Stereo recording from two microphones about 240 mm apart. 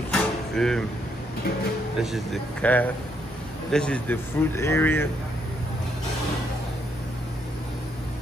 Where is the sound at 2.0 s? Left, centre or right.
Centre.